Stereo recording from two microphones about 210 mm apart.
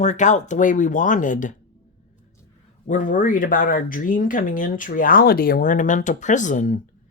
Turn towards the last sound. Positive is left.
turn(degrees=40)  # may be behind; listen again after turning